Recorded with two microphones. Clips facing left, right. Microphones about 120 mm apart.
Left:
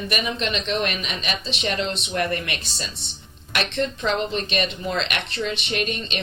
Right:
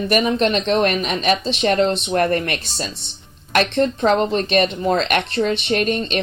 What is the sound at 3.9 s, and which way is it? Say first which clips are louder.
Speech: right 7 dB; 45° right (ahead or behind).